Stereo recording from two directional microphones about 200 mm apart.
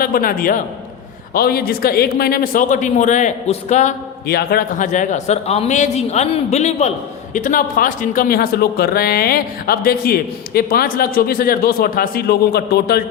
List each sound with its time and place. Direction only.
0.0 s speech: 45° left (ahead or behind)
4.3 s speech: 50° left (ahead or behind)